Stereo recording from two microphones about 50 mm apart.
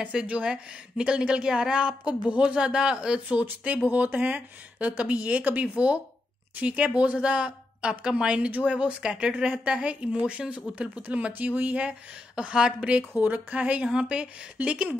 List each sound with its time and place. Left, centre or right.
0.0 s speech: right
3.6 s a woman's voice: right
8.5 s speech: right
8.7 s speech: centre; by 11.8 s right
11.8 s speech: right